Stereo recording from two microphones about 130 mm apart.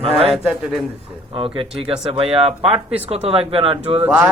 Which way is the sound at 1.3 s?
45° right (ahead or behind).